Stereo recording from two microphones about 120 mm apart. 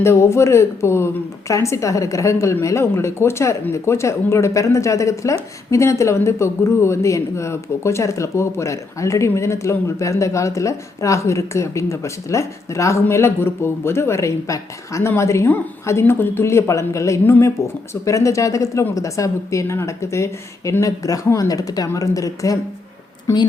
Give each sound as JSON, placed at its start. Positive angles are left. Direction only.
{"t": 0.0, "sound": "a woman's voice", "side_deg": 25}